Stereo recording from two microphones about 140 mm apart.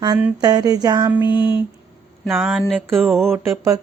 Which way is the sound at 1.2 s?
35° left (ahead or behind).